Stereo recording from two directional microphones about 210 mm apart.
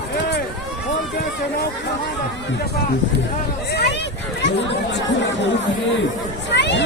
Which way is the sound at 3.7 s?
55° left (ahead or behind).